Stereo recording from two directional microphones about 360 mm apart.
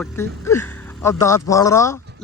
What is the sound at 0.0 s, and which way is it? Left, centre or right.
Speech, centre.